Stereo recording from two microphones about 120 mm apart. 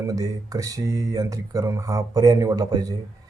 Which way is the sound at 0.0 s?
30° right (ahead or behind).